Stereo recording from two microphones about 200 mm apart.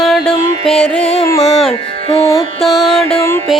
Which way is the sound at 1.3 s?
20° left (ahead or behind).